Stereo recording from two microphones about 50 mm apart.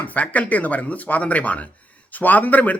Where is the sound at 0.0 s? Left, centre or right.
Left.